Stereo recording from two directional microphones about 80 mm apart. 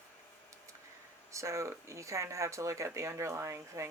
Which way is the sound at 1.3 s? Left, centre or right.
Right.